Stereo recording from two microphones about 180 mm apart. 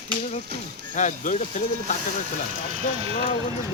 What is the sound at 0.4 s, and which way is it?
Speech, 60° right (ahead or behind).